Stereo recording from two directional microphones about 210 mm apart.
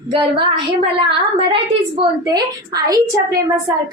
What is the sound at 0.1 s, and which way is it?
A woman's voice, 25° right (ahead or behind).